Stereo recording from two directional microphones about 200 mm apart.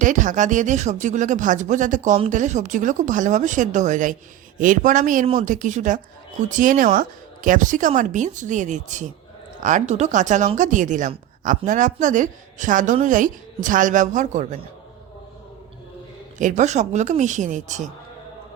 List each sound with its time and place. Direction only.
0.0 s speech: 40° right (ahead or behind)
16.4 s speech: 40° right (ahead or behind)